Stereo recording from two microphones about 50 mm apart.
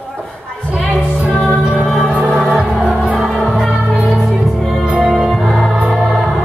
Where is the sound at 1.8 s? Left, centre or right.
Centre.